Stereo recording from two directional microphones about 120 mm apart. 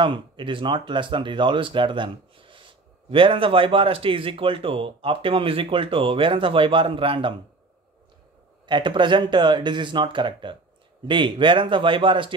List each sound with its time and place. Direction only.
0.0 s speech: 45° right (ahead or behind)
8.6 s speech: 40° right (ahead or behind)